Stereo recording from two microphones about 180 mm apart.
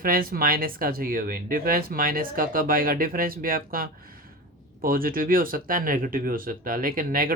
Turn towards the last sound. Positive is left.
turn(degrees=-50)  # may be behind; listen again after turning